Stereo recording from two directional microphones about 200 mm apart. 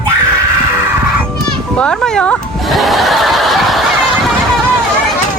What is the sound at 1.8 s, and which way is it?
Speech, 5° left (ahead or behind).